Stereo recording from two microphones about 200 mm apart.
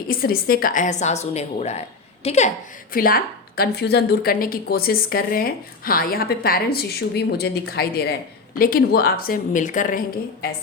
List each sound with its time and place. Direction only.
0.1 s a woman's voice: 50° left (ahead or behind)
2.9 s a woman's voice: 45° left (ahead or behind)